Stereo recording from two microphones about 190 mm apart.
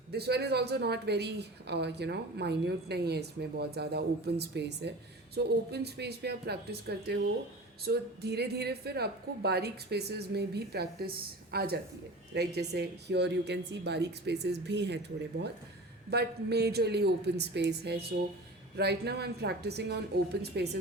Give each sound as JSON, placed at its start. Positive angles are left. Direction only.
{"t": 0.1, "sound": "a woman's voice", "side_deg": -60}
{"t": 16.0, "sound": "a woman's voice", "side_deg": -60}